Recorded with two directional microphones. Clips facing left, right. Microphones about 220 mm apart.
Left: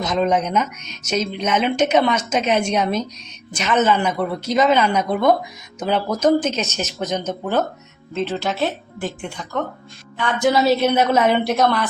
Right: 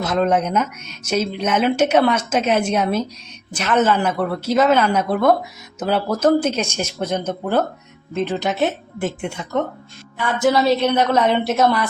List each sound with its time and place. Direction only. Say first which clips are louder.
0.0 s a woman's voice: right 1 dB; 5° right (ahead or behind); by 9.6 s 25° right (ahead or behind)
10.4 s a woman's voice: even; 5° left (ahead or behind)